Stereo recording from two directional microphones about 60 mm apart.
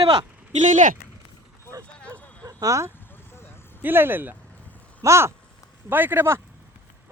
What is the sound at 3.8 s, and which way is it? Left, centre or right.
Speech, right.